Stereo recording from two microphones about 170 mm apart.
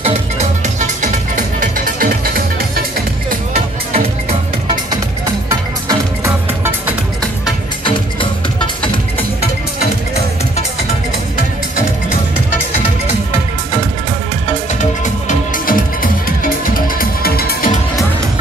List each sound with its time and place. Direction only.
0.0 s music: 45° right (ahead or behind); by 2.8 s 60° right (ahead or behind)
3.5 s music: 40° right (ahead or behind)
5.2 s music: 20° right (ahead or behind)
7.8 s music: 30° left (ahead or behind)
14.8 s music: 50° left (ahead or behind)